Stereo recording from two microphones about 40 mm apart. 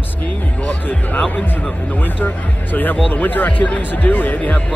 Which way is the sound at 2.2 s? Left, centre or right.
Left.